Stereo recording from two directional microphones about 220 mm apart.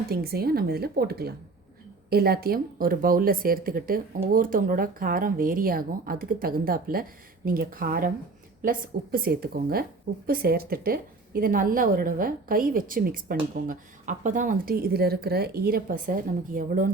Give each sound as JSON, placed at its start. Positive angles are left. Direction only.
{"t": 0.1, "sound": "a woman's voice", "side_deg": -45}
{"t": 9.1, "sound": "a woman's voice", "side_deg": -45}